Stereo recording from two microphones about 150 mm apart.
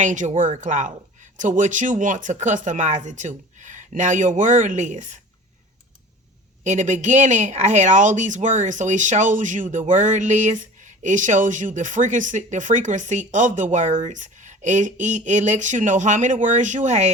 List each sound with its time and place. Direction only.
0.0 s speech: 55° right (ahead or behind)
6.7 s speech: 55° right (ahead or behind)